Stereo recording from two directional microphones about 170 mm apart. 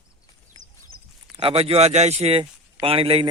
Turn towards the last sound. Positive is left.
turn(degrees=-35)  # may be behind; listen again after turning